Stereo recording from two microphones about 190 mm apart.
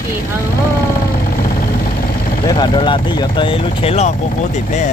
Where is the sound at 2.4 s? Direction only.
25° left (ahead or behind).